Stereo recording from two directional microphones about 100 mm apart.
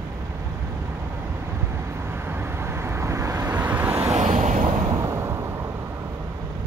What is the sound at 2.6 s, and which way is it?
Vehicle, 25° right (ahead or behind).